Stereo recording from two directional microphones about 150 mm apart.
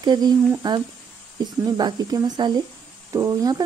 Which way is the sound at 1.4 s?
25° right (ahead or behind).